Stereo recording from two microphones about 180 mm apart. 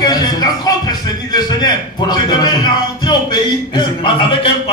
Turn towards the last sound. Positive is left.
turn(degrees=30)  # may be behind; listen again after turning